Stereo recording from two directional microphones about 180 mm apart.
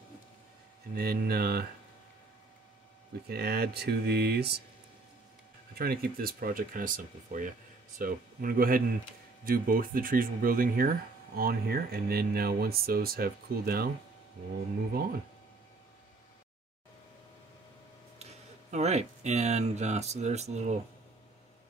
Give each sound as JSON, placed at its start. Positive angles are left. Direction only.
{"t": 0.9, "sound": "speech", "side_deg": -55}
{"t": 3.3, "sound": "speech", "side_deg": -60}
{"t": 5.8, "sound": "speech", "side_deg": -55}
{"t": 18.2, "sound": "speech", "side_deg": -40}